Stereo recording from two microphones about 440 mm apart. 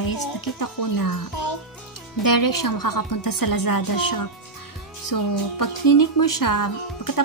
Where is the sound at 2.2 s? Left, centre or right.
Left.